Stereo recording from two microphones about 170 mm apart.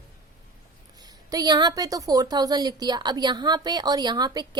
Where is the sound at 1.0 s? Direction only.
20° right (ahead or behind).